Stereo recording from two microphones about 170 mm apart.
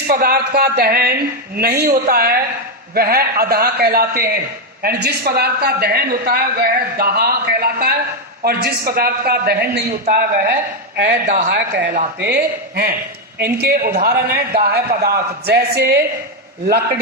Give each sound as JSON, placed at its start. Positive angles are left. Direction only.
{"t": 0.1, "sound": "a man's voice", "side_deg": -65}
{"t": 11.4, "sound": "speech", "side_deg": -90}
{"t": 12.2, "sound": "a man's voice", "side_deg": -70}